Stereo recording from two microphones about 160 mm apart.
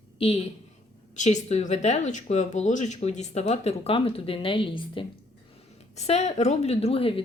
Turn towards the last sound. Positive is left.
turn(degrees=35)  # may be behind; listen again after turning